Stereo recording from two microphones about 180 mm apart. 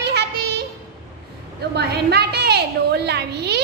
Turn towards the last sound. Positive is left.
turn(degrees=-65)  # may be behind; listen again after turning